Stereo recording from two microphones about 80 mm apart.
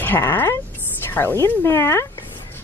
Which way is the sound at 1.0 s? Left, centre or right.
Left.